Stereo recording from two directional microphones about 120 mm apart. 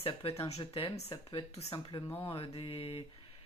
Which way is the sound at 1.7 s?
40° left (ahead or behind).